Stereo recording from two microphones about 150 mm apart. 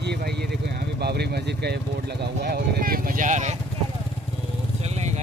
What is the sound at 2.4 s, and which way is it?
Speech, 80° right.